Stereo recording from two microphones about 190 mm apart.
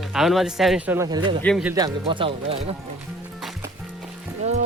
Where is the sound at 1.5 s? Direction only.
5° left (ahead or behind).